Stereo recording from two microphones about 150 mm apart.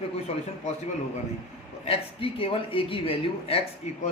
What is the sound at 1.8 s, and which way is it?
Speech, 40° left (ahead or behind).